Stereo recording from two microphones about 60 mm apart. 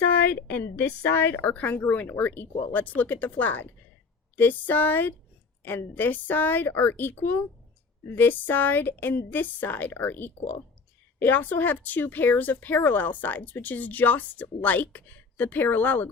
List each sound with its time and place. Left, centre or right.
0.1 s speech: left
1.4 s a woman's voice: left